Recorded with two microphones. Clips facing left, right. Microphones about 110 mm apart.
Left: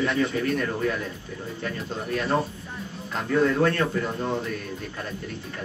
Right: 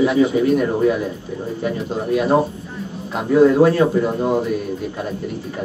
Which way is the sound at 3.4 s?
25° right (ahead or behind).